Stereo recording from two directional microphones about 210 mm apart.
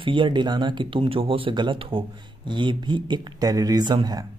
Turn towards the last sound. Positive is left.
turn(degrees=-20)  # may be behind; listen again after turning